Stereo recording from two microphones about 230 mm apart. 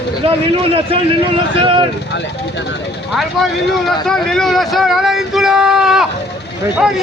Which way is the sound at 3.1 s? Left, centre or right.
Centre.